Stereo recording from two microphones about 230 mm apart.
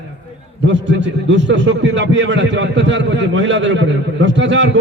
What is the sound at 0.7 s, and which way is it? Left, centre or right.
A man's voice, right.